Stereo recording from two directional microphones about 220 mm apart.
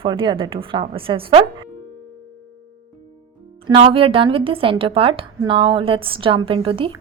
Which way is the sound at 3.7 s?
25° right (ahead or behind).